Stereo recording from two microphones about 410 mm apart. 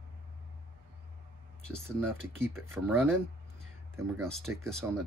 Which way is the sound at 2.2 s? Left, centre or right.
Right.